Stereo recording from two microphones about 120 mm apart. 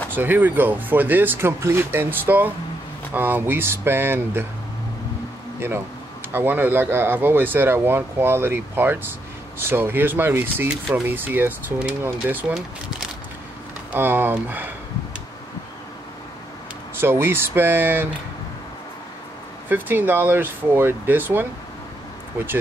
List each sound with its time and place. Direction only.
0.1 s speech: 15° right (ahead or behind)
6.3 s speech: 15° right (ahead or behind)
10.7 s speech: 5° right (ahead or behind)
16.9 s speech: 20° right (ahead or behind)
19.7 s speech: 15° right (ahead or behind)